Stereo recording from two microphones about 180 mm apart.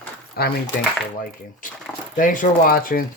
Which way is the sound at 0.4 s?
60° left (ahead or behind).